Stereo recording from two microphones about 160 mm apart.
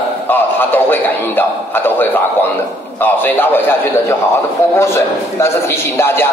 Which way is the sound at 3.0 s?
10° left (ahead or behind).